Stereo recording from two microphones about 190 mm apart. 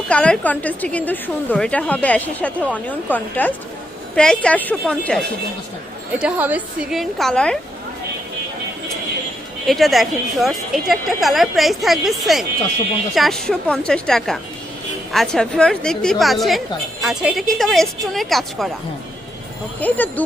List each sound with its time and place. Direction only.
0.1 s a woman's voice: 5° left (ahead or behind)
6.1 s a woman's voice: 5° right (ahead or behind)
9.6 s a woman's voice: centre (ahead or behind)
19.8 s a woman's voice: 10° left (ahead or behind)